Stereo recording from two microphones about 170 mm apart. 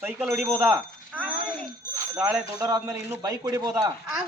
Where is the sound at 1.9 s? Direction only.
20° right (ahead or behind).